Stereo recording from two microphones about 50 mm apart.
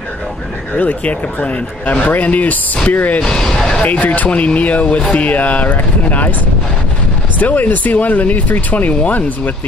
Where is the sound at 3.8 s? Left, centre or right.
Left.